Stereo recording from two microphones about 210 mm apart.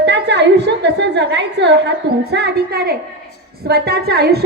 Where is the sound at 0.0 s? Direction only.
55° right (ahead or behind).